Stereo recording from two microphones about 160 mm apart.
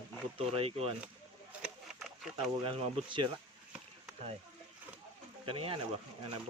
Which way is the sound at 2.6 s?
30° right (ahead or behind).